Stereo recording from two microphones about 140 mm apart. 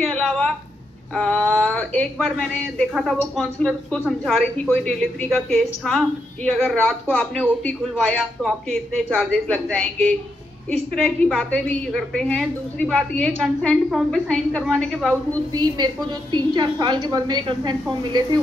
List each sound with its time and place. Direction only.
0.0 s a sound: centre (ahead or behind)
2.0 s a woman's voice: 5° left (ahead or behind)
10.9 s a woman's voice: 5° left (ahead or behind)
15.5 s a woman's voice: 30° right (ahead or behind)